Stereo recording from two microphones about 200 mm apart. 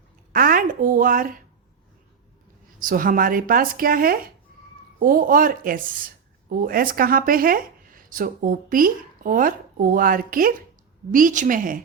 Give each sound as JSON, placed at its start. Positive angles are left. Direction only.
{"t": 0.3, "sound": "a woman's voice", "side_deg": -45}
{"t": 2.7, "sound": "a woman's voice", "side_deg": -45}